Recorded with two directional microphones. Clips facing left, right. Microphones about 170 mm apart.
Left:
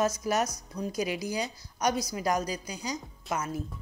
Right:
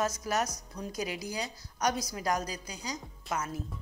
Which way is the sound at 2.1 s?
10° left (ahead or behind).